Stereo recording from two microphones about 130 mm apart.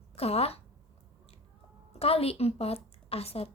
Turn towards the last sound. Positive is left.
turn(degrees=50)  # may be behind; listen again after turning